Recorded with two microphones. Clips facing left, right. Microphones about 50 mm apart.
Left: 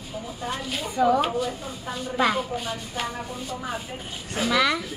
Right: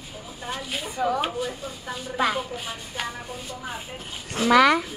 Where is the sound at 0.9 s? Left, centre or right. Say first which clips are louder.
Left 4 dB; centre.